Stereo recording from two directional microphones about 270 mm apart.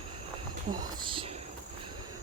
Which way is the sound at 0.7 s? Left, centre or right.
Centre.